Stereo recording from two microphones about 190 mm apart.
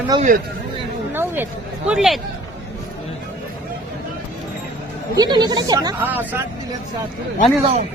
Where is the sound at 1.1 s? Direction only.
10° right (ahead or behind).